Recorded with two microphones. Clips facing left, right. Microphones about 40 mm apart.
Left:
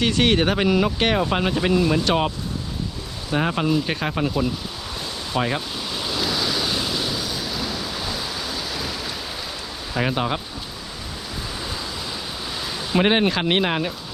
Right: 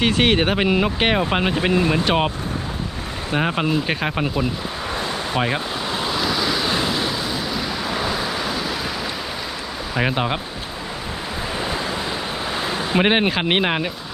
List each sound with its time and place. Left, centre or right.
0.0 s speech: right
3.3 s speech: centre
5.4 s vehicle: right
6.1 s waves: centre
6.7 s waves: right
7.5 s vehicle: centre
7.8 s vehicle: right
9.9 s speech: centre
12.5 s a sound: right
13.0 s speech: centre